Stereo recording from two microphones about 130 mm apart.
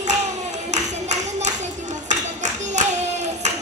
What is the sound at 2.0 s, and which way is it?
Clapping, 65° right (ahead or behind).